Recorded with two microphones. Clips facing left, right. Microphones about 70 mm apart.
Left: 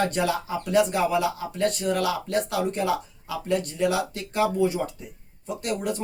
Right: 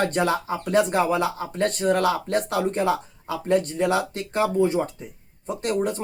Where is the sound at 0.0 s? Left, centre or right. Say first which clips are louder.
Right 2 dB; right.